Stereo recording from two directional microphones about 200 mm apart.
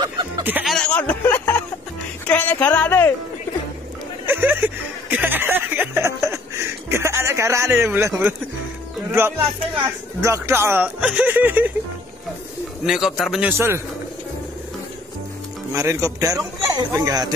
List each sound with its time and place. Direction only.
0.0 s music: 15° right (ahead or behind)
0.7 s speech: 5° left (ahead or behind)
4.3 s speech: 10° right (ahead or behind)
5.1 s a sound: 10° right (ahead or behind)
10.2 s speech: 15° right (ahead or behind)
12.8 s speech: centre (ahead or behind)
15.7 s speech: 15° right (ahead or behind)